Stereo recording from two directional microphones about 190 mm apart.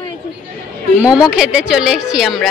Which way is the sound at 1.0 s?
5° right (ahead or behind).